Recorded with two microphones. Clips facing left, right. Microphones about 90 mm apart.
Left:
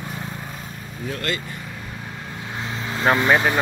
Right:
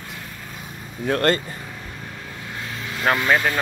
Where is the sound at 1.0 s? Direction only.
50° right (ahead or behind).